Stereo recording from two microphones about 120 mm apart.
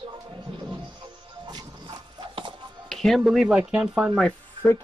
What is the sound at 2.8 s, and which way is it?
Speech, centre (ahead or behind).